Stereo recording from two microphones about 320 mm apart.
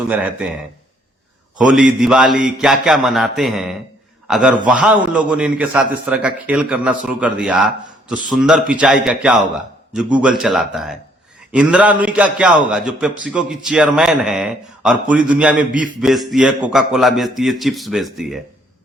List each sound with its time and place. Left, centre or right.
1.5 s a man's voice: centre